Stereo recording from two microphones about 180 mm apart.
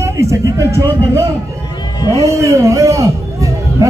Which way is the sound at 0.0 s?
15° right (ahead or behind).